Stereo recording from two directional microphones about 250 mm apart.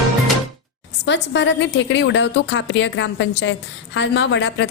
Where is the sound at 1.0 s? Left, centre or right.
Left.